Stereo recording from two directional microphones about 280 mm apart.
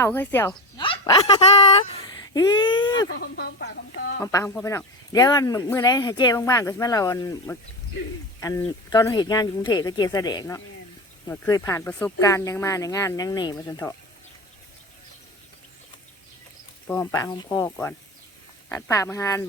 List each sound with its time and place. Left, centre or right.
0.0 s a woman's voice: centre
1.9 s a sound: centre
3.2 s speech: left
4.2 s speech: centre
16.9 s speech: centre